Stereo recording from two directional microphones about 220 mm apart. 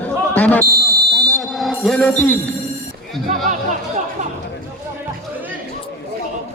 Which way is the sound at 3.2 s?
35° right (ahead or behind).